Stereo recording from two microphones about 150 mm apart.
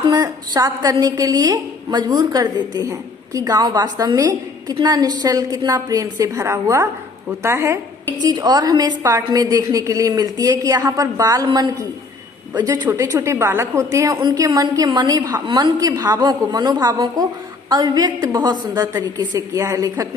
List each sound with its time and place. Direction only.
0.0 s a woman's voice: 25° right (ahead or behind)